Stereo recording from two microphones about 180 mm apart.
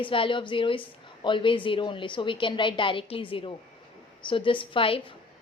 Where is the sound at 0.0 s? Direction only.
30° left (ahead or behind).